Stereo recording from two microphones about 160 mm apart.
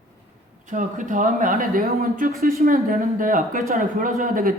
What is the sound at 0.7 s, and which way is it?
A man's voice, 55° right (ahead or behind).